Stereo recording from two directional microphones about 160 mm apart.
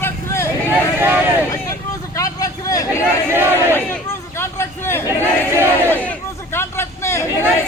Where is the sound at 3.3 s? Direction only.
15° right (ahead or behind).